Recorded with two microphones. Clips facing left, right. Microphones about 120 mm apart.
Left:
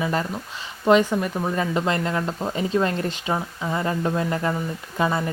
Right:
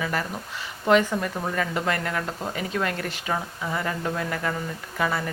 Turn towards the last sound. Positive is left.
turn(degrees=25)  # may be behind; listen again after turning